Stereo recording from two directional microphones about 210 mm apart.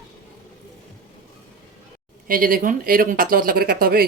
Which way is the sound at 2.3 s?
40° right (ahead or behind).